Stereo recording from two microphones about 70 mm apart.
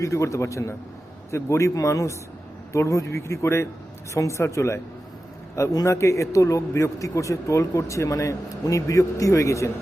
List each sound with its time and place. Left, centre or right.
0.0 s speech: left